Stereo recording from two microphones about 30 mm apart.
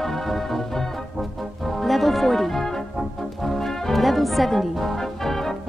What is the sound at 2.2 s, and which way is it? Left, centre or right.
Speech, centre.